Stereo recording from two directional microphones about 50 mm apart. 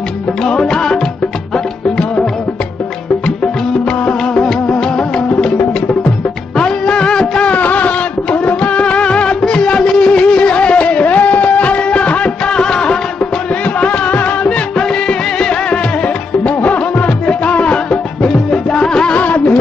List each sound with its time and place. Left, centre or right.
0.4 s music: centre
4.0 s music: left
6.6 s music of bollywood: centre
7.5 s music: left
14.8 s music: centre
16.4 s music: left
19.1 s music: left